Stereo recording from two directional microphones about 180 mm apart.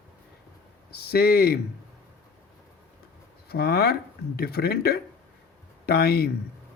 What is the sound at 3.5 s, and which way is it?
Speech, 60° left (ahead or behind).